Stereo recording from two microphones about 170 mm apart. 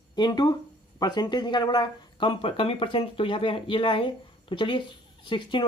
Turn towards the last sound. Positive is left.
turn(degrees=30)  # may be behind; listen again after turning